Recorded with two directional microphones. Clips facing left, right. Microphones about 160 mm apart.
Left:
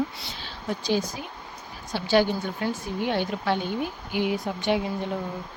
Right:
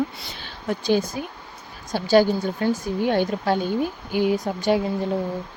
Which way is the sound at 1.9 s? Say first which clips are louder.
Right 5 dB; 40° right (ahead or behind).